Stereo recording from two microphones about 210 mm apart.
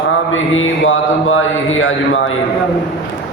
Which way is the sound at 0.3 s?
70° left (ahead or behind).